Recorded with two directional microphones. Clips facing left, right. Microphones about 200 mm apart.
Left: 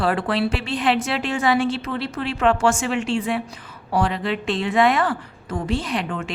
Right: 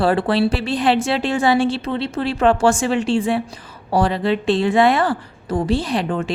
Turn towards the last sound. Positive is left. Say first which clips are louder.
# right 5 dB
turn(degrees=-35)  # may be behind; listen again after turning